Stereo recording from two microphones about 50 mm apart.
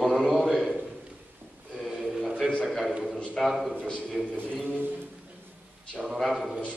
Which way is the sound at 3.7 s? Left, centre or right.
Left.